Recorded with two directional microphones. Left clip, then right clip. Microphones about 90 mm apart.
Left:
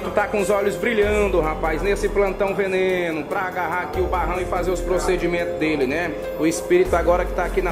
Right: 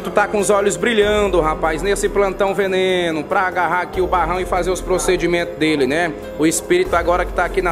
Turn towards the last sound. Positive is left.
turn(degrees=-70)  # may be behind; listen again after turning